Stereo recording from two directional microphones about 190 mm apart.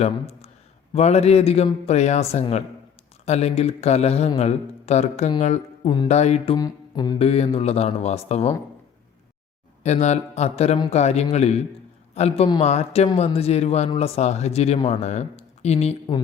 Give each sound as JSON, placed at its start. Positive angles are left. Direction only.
{"t": 0.0, "sound": "speech", "side_deg": 35}
{"t": 6.6, "sound": "speech", "side_deg": 20}
{"t": 9.8, "sound": "speech", "side_deg": 35}